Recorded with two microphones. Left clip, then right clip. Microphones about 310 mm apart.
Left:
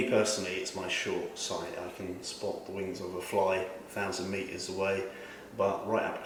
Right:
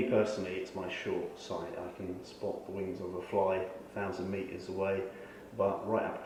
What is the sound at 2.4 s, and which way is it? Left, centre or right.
Speech, right.